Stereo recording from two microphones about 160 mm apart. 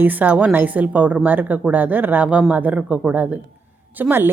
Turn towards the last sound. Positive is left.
turn(degrees=-15)  # may be behind; listen again after turning